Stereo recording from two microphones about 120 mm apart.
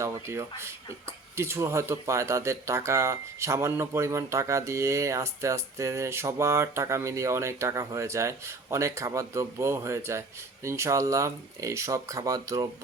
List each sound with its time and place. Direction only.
0.0 s speech: 20° right (ahead or behind)